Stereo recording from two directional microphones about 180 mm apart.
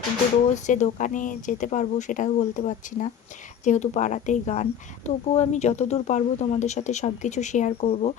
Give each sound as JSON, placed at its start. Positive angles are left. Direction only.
{"t": 0.5, "sound": "speech", "side_deg": 45}